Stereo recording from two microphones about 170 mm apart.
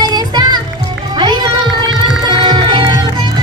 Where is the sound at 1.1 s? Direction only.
25° right (ahead or behind).